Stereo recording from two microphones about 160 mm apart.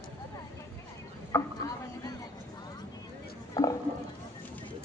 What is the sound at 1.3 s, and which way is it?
Chopping, 15° left (ahead or behind).